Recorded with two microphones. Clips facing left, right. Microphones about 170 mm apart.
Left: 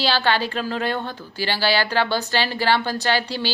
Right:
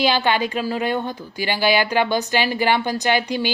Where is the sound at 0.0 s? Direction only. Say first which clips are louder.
Right 2 dB; 15° right (ahead or behind).